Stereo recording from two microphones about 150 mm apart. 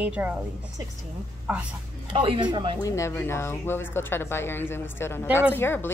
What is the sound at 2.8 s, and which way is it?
Speech, 20° left (ahead or behind).